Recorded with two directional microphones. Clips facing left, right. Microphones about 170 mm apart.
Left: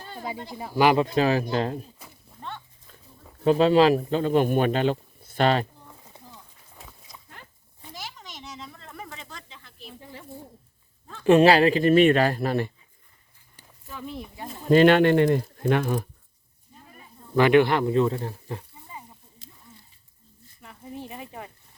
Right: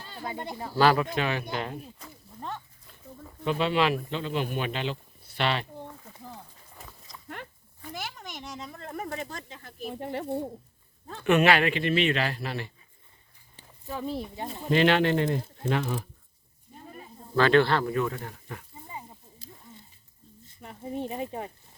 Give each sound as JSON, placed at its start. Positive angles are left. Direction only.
{"t": 0.6, "sound": "speech", "side_deg": 15}
{"t": 0.9, "sound": "speech", "side_deg": 35}
{"t": 3.4, "sound": "speech", "side_deg": 40}
{"t": 6.7, "sound": "livestock", "side_deg": 5}
{"t": 7.9, "sound": "a sound", "side_deg": -55}
{"t": 9.0, "sound": "snake", "side_deg": -55}
{"t": 9.9, "sound": "speech", "side_deg": -70}
{"t": 11.2, "sound": "speech", "side_deg": 30}
{"t": 13.8, "sound": "speech", "side_deg": -40}
{"t": 14.7, "sound": "speech", "side_deg": 45}
{"t": 16.8, "sound": "snake", "side_deg": -40}
{"t": 17.3, "sound": "speech", "side_deg": 15}
{"t": 20.6, "sound": "a sound", "side_deg": -30}
{"t": 21.1, "sound": "speech", "side_deg": -30}